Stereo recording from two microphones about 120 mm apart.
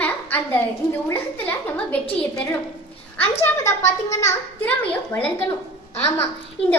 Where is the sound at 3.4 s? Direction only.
25° left (ahead or behind).